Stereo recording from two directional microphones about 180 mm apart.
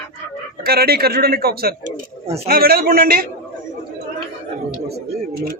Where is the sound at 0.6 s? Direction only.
60° right (ahead or behind).